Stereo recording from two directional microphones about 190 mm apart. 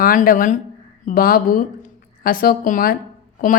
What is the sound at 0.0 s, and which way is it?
A woman's voice, 45° left (ahead or behind).